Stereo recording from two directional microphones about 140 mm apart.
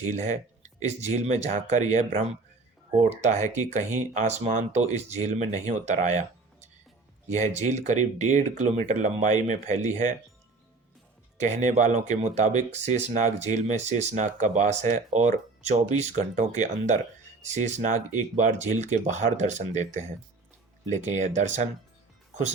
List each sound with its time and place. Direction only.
0.1 s speech: 60° right (ahead or behind)
11.3 s speech: 55° right (ahead or behind)